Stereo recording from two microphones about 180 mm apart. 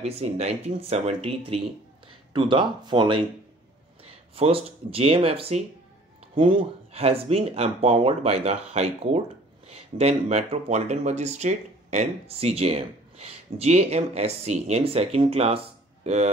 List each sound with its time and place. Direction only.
0.0 s speech: 35° right (ahead or behind)
4.0 s a sound: 35° right (ahead or behind)
4.9 s speech: 30° right (ahead or behind)